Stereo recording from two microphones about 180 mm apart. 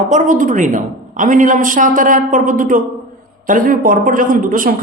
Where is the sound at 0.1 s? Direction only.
45° right (ahead or behind).